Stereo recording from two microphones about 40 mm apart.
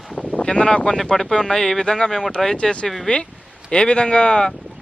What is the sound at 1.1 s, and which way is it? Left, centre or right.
Speech, centre.